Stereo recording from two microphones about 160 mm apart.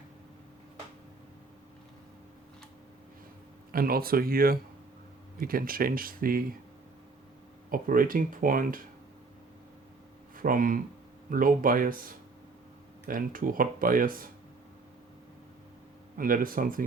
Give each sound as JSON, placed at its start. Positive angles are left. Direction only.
{"t": 3.7, "sound": "speech", "side_deg": -65}
{"t": 7.7, "sound": "speech", "side_deg": -60}
{"t": 10.3, "sound": "speech", "side_deg": -60}
{"t": 16.1, "sound": "speech", "side_deg": -60}